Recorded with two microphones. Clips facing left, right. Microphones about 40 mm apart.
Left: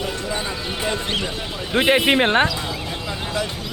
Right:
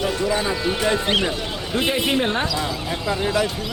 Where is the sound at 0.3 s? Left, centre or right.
Centre.